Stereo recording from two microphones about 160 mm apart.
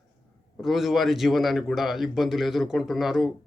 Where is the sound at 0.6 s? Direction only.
Centre (ahead or behind).